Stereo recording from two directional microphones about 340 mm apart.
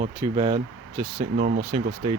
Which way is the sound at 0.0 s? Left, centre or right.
Centre.